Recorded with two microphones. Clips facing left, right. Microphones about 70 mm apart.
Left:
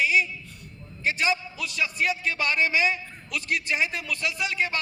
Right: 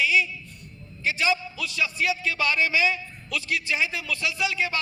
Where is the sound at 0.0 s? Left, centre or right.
Left.